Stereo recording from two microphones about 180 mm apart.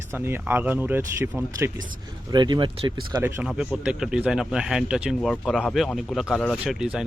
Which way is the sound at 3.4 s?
5° right (ahead or behind).